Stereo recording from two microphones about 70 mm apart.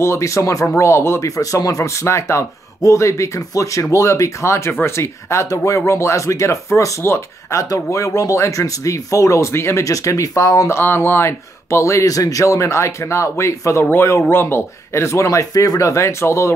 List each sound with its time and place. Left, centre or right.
0.0 s speech: left
1.3 s speech: left
7.0 s speech: left
7.7 s speech: left
9.8 s speech: left
10.8 s speech: left
14.3 s speech: left